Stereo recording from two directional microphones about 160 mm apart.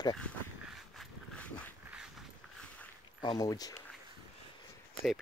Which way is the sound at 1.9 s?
5° right (ahead or behind).